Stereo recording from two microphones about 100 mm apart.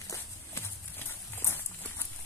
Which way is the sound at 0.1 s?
25° left (ahead or behind).